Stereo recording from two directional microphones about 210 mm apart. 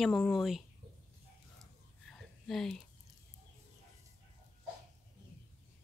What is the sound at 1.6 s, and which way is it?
Whispering, centre (ahead or behind).